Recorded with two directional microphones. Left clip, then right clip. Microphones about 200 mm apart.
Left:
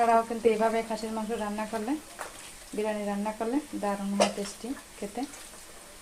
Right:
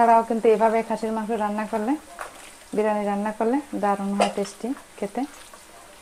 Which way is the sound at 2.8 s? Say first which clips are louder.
Right 8 dB; 25° right (ahead or behind).